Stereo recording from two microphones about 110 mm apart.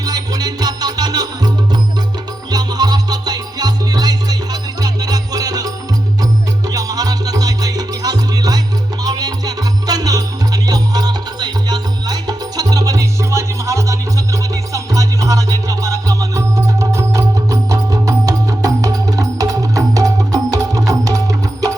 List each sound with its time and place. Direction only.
0.0 s music: 35° right (ahead or behind)